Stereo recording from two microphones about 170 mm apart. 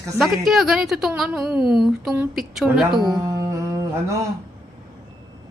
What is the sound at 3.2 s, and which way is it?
Music, 20° right (ahead or behind).